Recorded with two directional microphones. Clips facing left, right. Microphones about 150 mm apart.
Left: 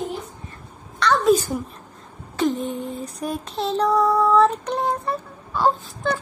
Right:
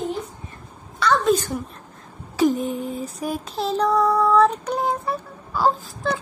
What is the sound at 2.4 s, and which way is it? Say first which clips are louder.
Female singing: right 3 dB; 5° right (ahead or behind).